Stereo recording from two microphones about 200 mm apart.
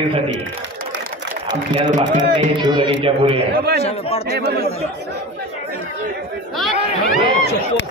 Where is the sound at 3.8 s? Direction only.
30° left (ahead or behind).